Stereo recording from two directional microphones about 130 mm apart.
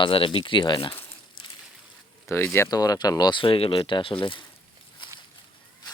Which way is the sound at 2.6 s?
30° left (ahead or behind).